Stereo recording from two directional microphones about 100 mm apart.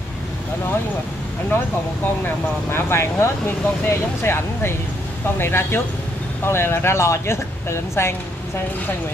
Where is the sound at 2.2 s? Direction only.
20° left (ahead or behind).